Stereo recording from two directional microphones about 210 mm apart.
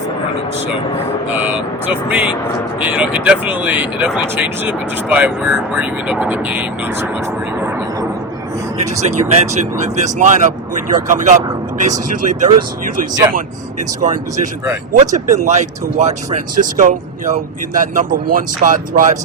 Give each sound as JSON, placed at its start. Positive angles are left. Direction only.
{"t": 2.0, "sound": "speech", "side_deg": -5}
{"t": 9.0, "sound": "speech", "side_deg": -30}
{"t": 14.0, "sound": "speech", "side_deg": -35}